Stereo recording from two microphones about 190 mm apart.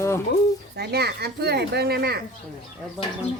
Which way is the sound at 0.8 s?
60° right (ahead or behind).